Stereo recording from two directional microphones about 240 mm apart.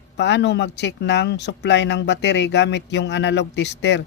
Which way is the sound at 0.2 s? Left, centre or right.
Left.